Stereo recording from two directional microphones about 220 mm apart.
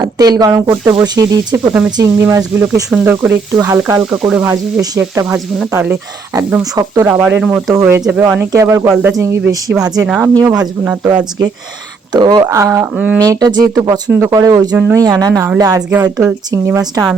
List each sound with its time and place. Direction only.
0.0 s speech: 20° right (ahead or behind)
12.1 s speech: 20° right (ahead or behind)